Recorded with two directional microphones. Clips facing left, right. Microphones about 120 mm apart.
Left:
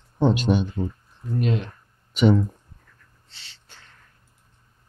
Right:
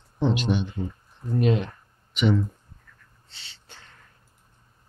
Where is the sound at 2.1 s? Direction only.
40° left (ahead or behind).